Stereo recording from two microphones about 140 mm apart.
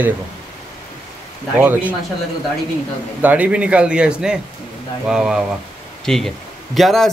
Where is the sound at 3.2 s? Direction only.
10° right (ahead or behind).